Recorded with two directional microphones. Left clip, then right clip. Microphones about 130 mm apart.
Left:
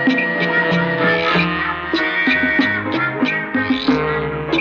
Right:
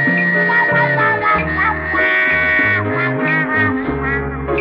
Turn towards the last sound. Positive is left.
turn(degrees=-45)  # may be behind; listen again after turning